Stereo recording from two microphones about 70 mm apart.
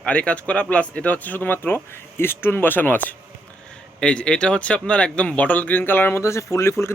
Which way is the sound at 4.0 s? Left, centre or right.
Centre.